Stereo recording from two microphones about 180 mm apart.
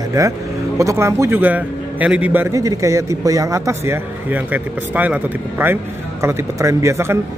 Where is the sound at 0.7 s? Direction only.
15° right (ahead or behind).